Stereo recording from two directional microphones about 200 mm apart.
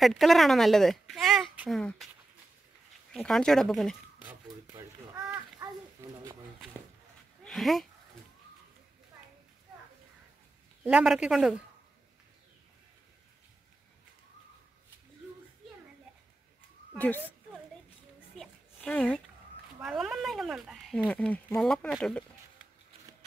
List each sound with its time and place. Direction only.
0.0 s speech: centre (ahead or behind)
3.1 s speech: centre (ahead or behind)
5.3 s a sound: 15° right (ahead or behind)
7.4 s speech: centre (ahead or behind)
10.8 s speech: 5° right (ahead or behind)
16.9 s speech: 10° left (ahead or behind)
18.3 s a sound: centre (ahead or behind)
19.8 s speech: 5° right (ahead or behind)